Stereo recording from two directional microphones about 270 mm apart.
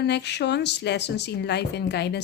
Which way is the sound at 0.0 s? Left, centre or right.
Left.